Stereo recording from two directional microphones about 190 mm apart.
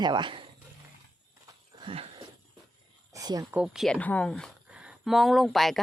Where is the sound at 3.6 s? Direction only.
Centre (ahead or behind).